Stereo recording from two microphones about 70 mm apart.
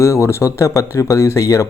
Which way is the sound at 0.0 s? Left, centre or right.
Left.